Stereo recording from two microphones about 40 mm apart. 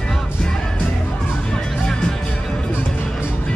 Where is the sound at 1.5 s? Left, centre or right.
Centre.